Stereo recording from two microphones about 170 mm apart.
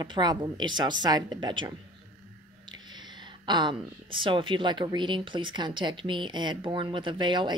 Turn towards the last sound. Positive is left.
turn(degrees=-25)  # may be behind; listen again after turning